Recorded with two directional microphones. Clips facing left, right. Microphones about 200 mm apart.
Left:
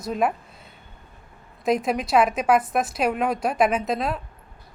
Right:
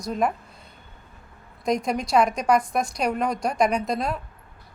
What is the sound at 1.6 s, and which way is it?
A woman's voice, 5° left (ahead or behind).